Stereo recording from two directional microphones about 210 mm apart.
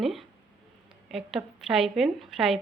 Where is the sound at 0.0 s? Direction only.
Centre (ahead or behind).